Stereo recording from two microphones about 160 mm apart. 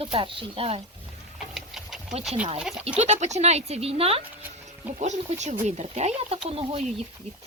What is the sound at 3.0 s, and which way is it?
Speech, 45° right (ahead or behind).